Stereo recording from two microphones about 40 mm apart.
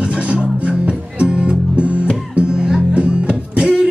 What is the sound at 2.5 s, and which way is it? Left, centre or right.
Music, centre.